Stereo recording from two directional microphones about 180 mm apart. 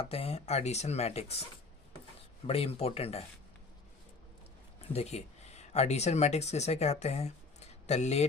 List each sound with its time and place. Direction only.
0.0 s speech: 35° left (ahead or behind)
2.5 s speech: 35° left (ahead or behind)
4.9 s speech: 35° left (ahead or behind)